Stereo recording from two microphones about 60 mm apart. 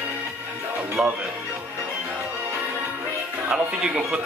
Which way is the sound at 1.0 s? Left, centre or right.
Centre.